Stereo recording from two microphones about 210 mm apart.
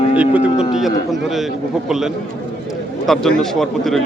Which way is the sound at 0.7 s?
Centre (ahead or behind).